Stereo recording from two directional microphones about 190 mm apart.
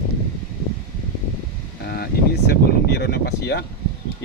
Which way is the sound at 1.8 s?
55° left (ahead or behind).